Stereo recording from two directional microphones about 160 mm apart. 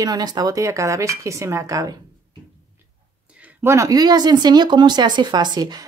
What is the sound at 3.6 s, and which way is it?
Speech, 20° right (ahead or behind).